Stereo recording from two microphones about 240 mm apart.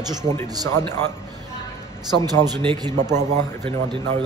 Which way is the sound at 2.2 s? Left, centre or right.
Centre.